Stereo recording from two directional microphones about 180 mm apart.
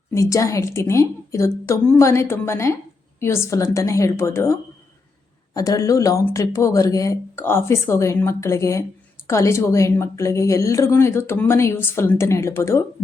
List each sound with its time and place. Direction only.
0.1 s a woman's voice: 15° left (ahead or behind)
5.5 s a woman's voice: 20° left (ahead or behind)